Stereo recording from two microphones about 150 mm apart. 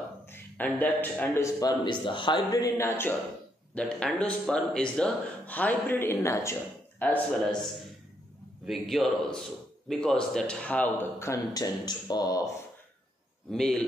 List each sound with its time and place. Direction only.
0.3 s a man's voice: 10° left (ahead or behind)
1.9 s a man's voice: 30° left (ahead or behind); by 7.2 s 10° left (ahead or behind)
8.6 s a man's voice: centre (ahead or behind); by 12.4 s 25° left (ahead or behind)
13.5 s a man's voice: centre (ahead or behind)